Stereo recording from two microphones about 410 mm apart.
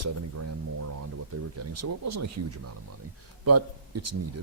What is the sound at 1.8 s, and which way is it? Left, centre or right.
Speech, right.